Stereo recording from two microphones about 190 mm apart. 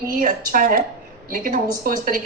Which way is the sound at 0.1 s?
45° right (ahead or behind).